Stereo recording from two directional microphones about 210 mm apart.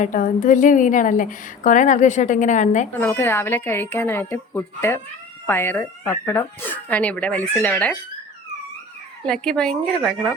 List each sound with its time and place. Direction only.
0.0 s a woman's voice: 40° left (ahead or behind)
3.0 s speech: 10° left (ahead or behind)
9.2 s a woman's voice: 5° left (ahead or behind)